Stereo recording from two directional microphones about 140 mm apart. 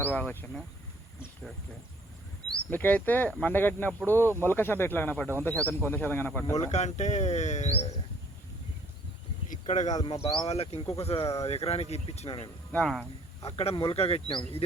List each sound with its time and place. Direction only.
0.0 s speech: 10° left (ahead or behind)
2.5 s speech: 10° left (ahead or behind)
6.7 s speech: 55° left (ahead or behind)
9.5 s speech: 55° left (ahead or behind)
9.9 s speech: 25° left (ahead or behind)
10.2 s speech: 50° left (ahead or behind)
12.7 s speech: 5° left (ahead or behind)
13.4 s speech: 45° left (ahead or behind)